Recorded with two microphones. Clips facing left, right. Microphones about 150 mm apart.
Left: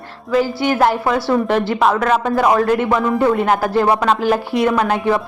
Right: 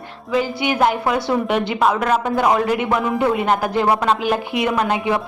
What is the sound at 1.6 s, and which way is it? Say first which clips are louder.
A man's voice: left 2 dB; 15° right (ahead or behind).